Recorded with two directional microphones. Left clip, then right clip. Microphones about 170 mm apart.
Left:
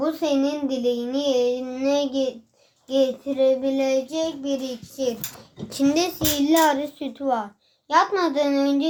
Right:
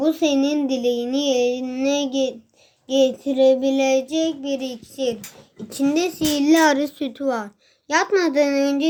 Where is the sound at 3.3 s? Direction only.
65° right (ahead or behind).